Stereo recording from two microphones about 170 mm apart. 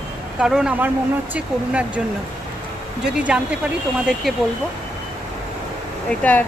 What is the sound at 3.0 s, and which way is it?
Speech, 5° right (ahead or behind).